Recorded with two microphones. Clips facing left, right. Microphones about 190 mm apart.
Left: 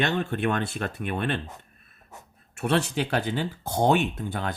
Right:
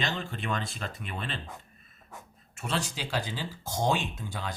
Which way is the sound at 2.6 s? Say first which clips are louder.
Left 9 dB; 60° left (ahead or behind).